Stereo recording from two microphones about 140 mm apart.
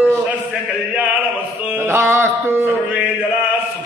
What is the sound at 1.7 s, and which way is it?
Mantra, 15° right (ahead or behind).